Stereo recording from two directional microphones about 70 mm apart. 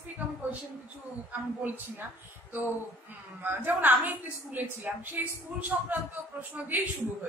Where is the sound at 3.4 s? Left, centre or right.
Right.